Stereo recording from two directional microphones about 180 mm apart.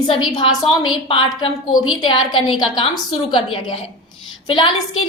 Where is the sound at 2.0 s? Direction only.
25° left (ahead or behind).